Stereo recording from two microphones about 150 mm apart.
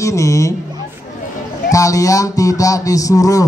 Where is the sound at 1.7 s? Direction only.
20° left (ahead or behind).